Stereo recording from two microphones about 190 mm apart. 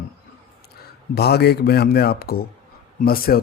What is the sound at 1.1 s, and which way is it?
A man's voice, 55° left (ahead or behind).